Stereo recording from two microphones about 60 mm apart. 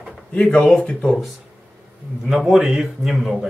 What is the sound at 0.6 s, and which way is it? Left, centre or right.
Speech, centre.